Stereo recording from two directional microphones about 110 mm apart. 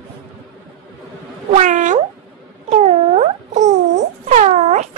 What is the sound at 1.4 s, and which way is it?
Cat, 90° right.